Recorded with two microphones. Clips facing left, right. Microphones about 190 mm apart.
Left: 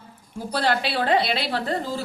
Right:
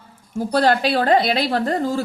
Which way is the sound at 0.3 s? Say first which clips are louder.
Right 6 dB; 45° right (ahead or behind).